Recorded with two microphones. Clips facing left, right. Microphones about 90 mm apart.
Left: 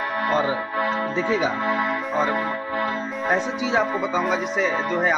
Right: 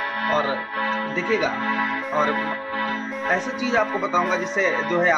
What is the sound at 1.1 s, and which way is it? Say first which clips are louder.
Speech: right 1 dB; 20° left (ahead or behind).